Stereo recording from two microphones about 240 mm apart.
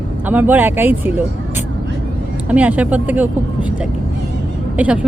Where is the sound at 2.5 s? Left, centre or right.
Centre.